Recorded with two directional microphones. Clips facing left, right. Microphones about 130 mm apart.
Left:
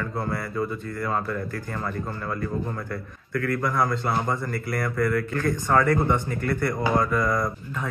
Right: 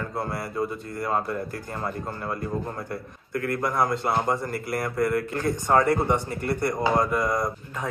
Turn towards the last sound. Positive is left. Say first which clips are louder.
# even
turn(degrees=-25)  # may be behind; listen again after turning